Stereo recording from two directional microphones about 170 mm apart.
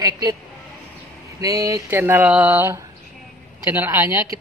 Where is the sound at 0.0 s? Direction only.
20° right (ahead or behind).